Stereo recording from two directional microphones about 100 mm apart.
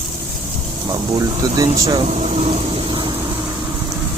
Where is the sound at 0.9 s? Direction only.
40° right (ahead or behind).